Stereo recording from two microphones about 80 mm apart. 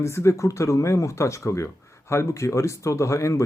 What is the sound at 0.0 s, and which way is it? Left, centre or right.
Speech, left.